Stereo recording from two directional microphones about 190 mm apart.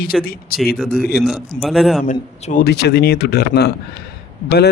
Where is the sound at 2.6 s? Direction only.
60° left (ahead or behind).